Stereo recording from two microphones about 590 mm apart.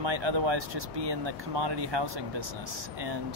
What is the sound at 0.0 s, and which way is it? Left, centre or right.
Speech, right.